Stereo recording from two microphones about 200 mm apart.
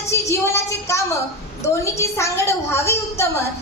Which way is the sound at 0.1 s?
15° left (ahead or behind).